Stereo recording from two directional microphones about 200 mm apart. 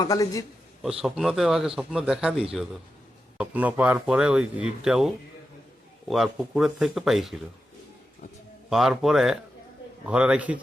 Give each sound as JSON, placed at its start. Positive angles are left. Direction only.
{"t": 0.0, "sound": "a man's voice", "side_deg": 15}
{"t": 0.8, "sound": "speech", "side_deg": 0}
{"t": 8.7, "sound": "speech", "side_deg": 0}